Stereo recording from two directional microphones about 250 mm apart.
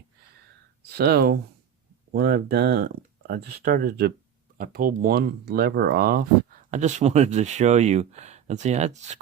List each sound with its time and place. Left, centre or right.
0.9 s speech: right